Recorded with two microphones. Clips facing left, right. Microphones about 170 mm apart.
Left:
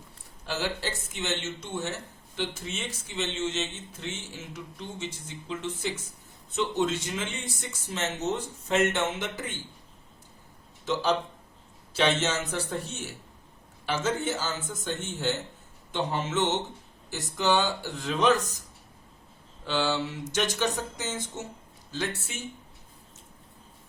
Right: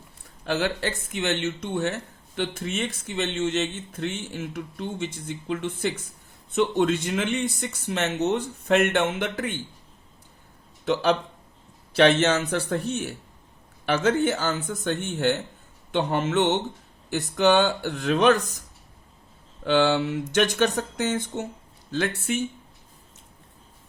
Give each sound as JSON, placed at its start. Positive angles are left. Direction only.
{"t": 0.4, "sound": "speech", "side_deg": -60}
{"t": 10.8, "sound": "speech", "side_deg": -60}
{"t": 19.6, "sound": "speech", "side_deg": -60}